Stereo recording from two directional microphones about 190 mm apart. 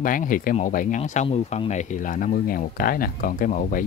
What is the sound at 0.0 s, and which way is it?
Speech, 45° left (ahead or behind).